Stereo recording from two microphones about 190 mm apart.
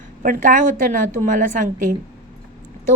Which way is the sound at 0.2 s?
45° right (ahead or behind).